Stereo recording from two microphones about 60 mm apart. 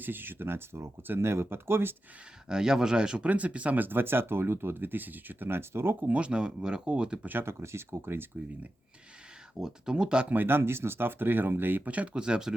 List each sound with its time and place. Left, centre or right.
0.0 s speech: right
2.5 s speech: centre; by 6.0 s right
6.0 s speech: right
7.3 s speech: right
9.6 s speech: centre
10.3 s speech: right
11.9 s speech: right